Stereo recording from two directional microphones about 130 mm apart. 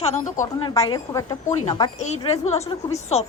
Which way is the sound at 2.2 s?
50° left (ahead or behind).